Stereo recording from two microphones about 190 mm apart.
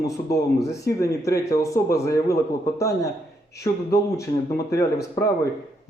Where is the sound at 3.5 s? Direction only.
15° left (ahead or behind).